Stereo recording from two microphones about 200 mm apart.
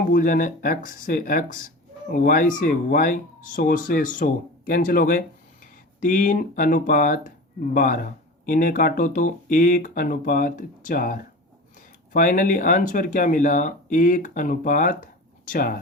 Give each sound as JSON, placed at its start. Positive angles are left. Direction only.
{"t": 0.0, "sound": "speech", "side_deg": 45}